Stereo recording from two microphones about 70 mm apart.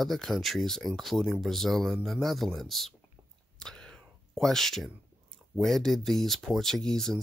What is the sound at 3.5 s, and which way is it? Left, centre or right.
Whispering, centre.